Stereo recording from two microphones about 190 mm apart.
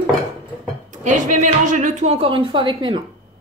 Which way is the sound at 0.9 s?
40° right (ahead or behind).